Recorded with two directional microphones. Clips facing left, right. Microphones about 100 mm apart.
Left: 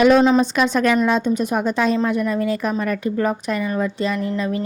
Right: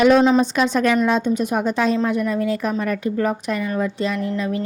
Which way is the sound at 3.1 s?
35° left (ahead or behind).